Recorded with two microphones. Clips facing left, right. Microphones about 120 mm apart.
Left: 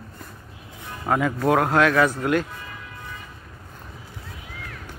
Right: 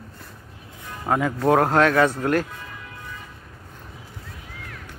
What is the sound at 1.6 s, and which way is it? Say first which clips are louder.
Speech: right 1 dB; 35° right (ahead or behind).